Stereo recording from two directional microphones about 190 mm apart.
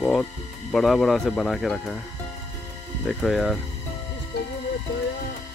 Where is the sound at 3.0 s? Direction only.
Centre (ahead or behind).